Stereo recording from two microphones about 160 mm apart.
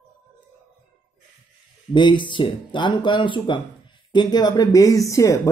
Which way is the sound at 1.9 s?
30° left (ahead or behind).